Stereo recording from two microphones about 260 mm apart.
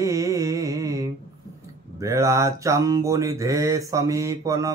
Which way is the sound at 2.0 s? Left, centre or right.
Centre.